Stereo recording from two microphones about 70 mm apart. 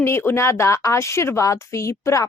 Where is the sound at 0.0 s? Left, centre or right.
Left.